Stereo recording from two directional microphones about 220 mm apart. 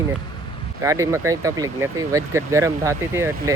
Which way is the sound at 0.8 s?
15° right (ahead or behind).